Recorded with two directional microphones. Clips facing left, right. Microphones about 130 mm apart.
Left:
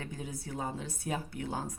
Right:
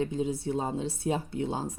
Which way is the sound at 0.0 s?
25° right (ahead or behind).